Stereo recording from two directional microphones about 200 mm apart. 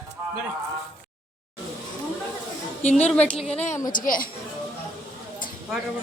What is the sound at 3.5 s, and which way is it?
Speech, 30° left (ahead or behind).